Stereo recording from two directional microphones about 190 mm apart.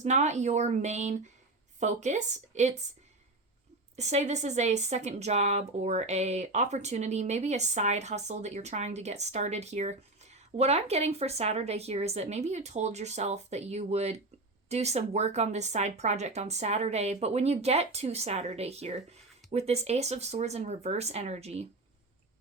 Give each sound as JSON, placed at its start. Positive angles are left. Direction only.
{"t": 0.0, "sound": "speech", "side_deg": -40}
{"t": 3.9, "sound": "speech", "side_deg": -35}